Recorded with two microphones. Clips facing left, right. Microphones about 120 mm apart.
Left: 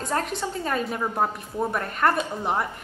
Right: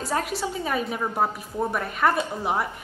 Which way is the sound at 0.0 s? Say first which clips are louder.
Even; 5° right (ahead or behind).